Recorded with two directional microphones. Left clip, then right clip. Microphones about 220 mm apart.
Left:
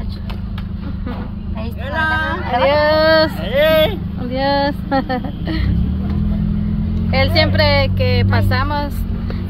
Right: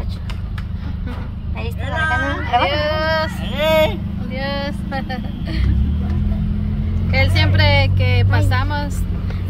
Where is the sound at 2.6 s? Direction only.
25° left (ahead or behind).